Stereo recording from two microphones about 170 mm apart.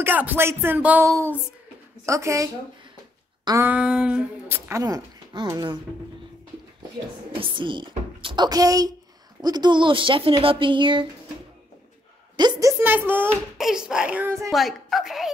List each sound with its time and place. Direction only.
0.0 s speech: 10° right (ahead or behind); by 5.8 s 25° right (ahead or behind)
7.3 s speech: 30° right (ahead or behind)
12.4 s a child's voice: 20° right (ahead or behind)
14.5 s a child's voice: centre (ahead or behind)